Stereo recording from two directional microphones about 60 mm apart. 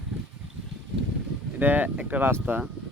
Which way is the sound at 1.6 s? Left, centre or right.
Right.